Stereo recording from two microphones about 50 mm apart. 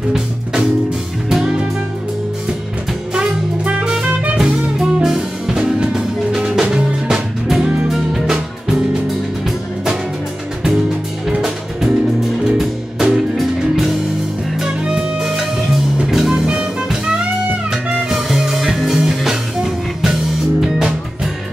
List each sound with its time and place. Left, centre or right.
0.1 s music: centre
3.6 s music: centre
12.4 s music: centre
14.8 s music: centre
15.2 s music: centre
17.6 s music: centre